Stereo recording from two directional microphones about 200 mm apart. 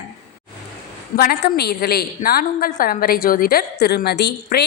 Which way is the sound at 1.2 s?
50° left (ahead or behind).